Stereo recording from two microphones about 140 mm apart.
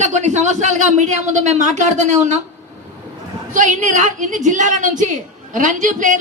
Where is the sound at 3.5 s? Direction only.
65° right (ahead or behind).